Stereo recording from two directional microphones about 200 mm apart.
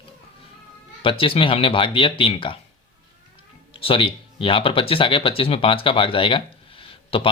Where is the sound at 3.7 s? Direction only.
25° left (ahead or behind).